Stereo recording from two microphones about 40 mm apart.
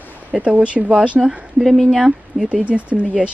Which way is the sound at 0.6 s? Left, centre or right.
Right.